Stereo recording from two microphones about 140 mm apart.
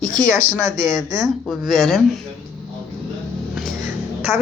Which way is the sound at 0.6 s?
25° right (ahead or behind).